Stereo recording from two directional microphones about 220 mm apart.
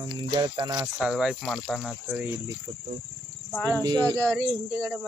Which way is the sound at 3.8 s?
20° right (ahead or behind).